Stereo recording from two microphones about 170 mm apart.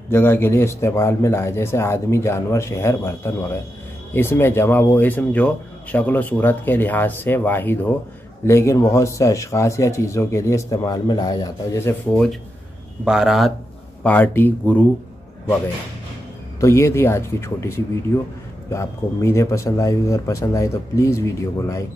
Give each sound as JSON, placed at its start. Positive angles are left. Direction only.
{"t": 0.1, "sound": "speech", "side_deg": 15}
{"t": 13.0, "sound": "speech", "side_deg": -5}
{"t": 14.0, "sound": "speech", "side_deg": 10}
{"t": 16.5, "sound": "speech", "side_deg": 15}